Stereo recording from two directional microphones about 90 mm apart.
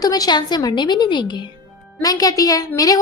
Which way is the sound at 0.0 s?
50° left (ahead or behind).